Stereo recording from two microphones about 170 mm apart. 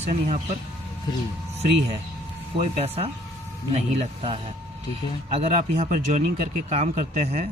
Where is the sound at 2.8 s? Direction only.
35° right (ahead or behind).